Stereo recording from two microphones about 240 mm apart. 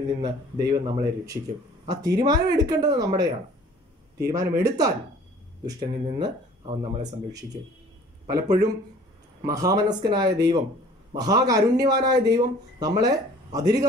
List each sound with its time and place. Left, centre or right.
0.2 s speech: centre
8.3 s speech: centre